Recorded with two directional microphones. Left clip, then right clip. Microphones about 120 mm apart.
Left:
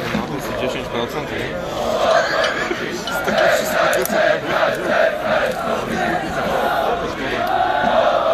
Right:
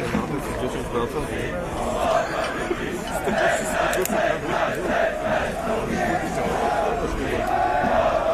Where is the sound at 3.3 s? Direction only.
30° left (ahead or behind).